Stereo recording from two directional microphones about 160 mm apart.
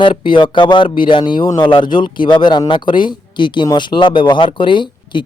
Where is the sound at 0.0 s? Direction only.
30° left (ahead or behind).